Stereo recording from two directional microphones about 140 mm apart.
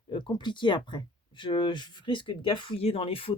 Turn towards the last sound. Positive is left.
turn(degrees=40)  # may be behind; listen again after turning